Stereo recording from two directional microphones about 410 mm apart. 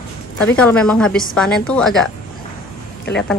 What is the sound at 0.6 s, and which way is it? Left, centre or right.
A woman's voice, centre.